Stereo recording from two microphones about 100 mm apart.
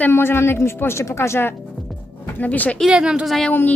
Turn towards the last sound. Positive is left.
turn(degrees=15)  # may be behind; listen again after turning